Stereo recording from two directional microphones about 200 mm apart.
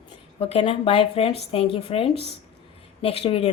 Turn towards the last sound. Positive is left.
turn(degrees=30)  # may be behind; listen again after turning